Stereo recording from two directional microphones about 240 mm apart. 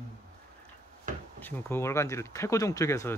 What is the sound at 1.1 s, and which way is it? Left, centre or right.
Wood, right.